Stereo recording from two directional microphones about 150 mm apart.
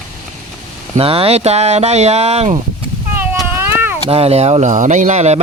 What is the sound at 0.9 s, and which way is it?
A man's voice, 40° right (ahead or behind).